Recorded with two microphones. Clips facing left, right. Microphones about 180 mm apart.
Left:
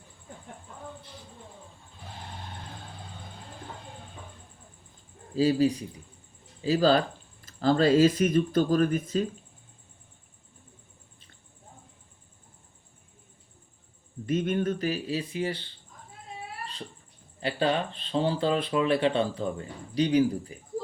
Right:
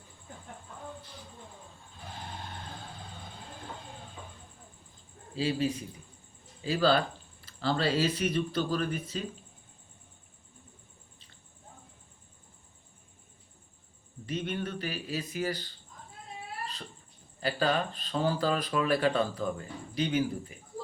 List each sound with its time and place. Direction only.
5.4 s speech: 35° left (ahead or behind)
14.3 s speech: 50° left (ahead or behind); by 15.6 s 30° left (ahead or behind)
17.4 s speech: 25° left (ahead or behind)